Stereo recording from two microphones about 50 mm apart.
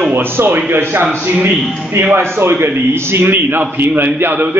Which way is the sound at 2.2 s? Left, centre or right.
Right.